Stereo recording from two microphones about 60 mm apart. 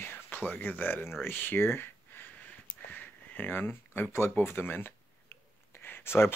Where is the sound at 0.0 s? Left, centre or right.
Left.